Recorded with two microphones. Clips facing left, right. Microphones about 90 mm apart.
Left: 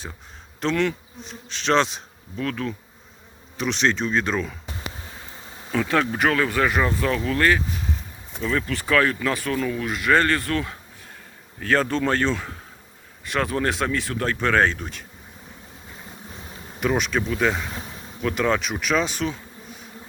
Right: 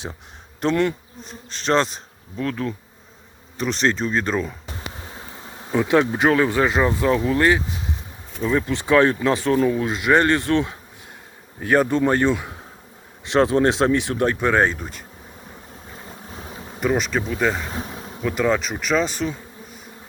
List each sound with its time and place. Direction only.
0.6 s bee: 10° right (ahead or behind)
2.3 s speech: 10° right (ahead or behind)
3.6 s bee: centre (ahead or behind)
5.7 s speech: 20° right (ahead or behind)
13.2 s speech: 25° right (ahead or behind)
14.8 s bee: 5° right (ahead or behind)
16.8 s bee: centre (ahead or behind)